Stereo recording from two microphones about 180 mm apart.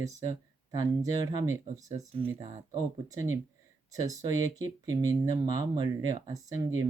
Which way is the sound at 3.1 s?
20° right (ahead or behind).